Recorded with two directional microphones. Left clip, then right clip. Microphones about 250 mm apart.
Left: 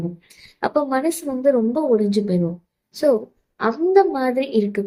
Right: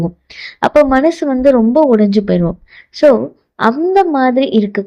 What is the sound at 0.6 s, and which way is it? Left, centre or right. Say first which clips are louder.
A woman's voice: right 10 dB; right.